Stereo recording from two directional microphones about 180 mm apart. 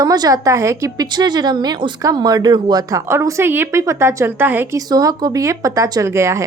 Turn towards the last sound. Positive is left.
turn(degrees=-15)  # may be behind; listen again after turning